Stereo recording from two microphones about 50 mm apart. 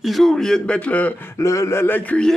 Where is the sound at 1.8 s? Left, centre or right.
Left.